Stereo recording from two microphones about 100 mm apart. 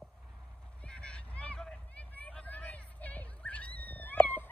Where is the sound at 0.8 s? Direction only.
10° left (ahead or behind).